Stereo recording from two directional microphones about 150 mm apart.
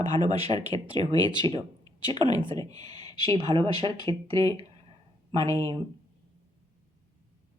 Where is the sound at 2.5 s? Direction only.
25° left (ahead or behind).